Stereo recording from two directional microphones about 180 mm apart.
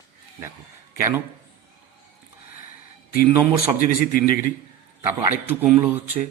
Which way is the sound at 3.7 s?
55° left (ahead or behind).